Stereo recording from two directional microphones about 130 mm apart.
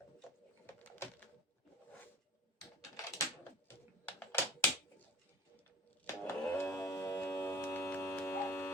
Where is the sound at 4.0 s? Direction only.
15° left (ahead or behind).